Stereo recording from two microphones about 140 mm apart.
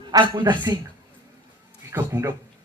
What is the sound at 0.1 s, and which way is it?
Speech, 30° right (ahead or behind).